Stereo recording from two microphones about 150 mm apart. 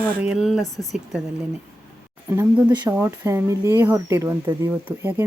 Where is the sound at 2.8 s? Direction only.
15° right (ahead or behind).